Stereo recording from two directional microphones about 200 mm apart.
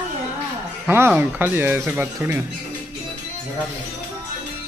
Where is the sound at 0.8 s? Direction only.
10° right (ahead or behind).